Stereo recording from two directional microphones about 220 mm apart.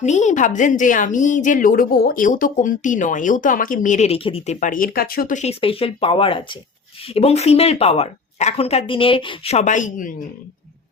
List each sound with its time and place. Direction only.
0.0 s a woman's voice: 30° left (ahead or behind)